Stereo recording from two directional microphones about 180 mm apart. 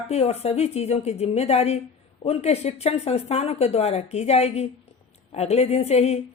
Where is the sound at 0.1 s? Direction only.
35° left (ahead or behind).